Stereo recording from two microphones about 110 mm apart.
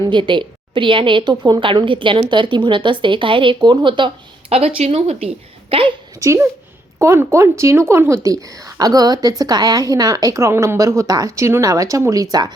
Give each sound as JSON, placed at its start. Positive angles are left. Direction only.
{"t": 0.0, "sound": "a woman's voice", "side_deg": -45}
{"t": 4.5, "sound": "a woman's voice", "side_deg": -65}
{"t": 6.1, "sound": "a woman's voice", "side_deg": -25}